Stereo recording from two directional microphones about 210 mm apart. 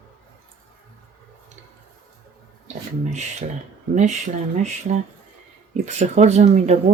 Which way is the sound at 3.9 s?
35° right (ahead or behind).